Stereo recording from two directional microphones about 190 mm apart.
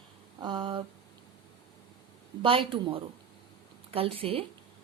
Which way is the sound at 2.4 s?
25° right (ahead or behind).